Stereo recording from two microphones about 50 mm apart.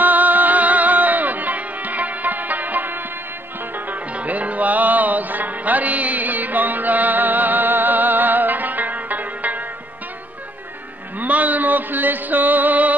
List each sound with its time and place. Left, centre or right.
0.0 s music: right
11.1 s music: right